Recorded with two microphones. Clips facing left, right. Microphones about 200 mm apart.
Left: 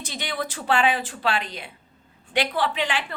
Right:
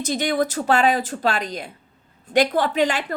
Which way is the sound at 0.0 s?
45° right (ahead or behind).